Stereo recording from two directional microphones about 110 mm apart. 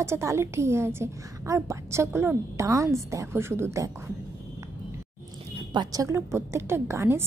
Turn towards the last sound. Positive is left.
turn(degrees=-25)  # may be behind; listen again after turning